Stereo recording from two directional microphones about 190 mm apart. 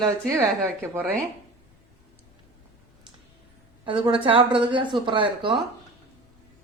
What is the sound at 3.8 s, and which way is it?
Speech, 25° right (ahead or behind).